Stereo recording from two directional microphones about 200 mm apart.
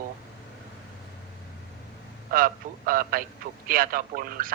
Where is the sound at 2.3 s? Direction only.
45° right (ahead or behind).